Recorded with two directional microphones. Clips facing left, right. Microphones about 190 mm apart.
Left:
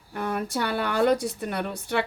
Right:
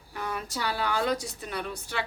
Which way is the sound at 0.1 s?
50° left (ahead or behind).